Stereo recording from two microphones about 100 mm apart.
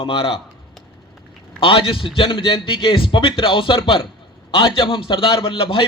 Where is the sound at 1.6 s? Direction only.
60° left (ahead or behind).